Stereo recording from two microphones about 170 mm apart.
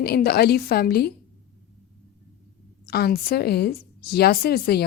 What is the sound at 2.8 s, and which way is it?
Speech, 65° left (ahead or behind).